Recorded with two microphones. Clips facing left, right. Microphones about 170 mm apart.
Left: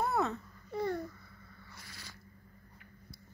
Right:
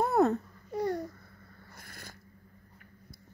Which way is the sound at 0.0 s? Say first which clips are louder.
Right 7 dB; 50° right (ahead or behind).